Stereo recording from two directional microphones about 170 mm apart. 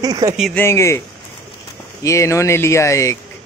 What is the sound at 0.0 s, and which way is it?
Speech, 20° right (ahead or behind).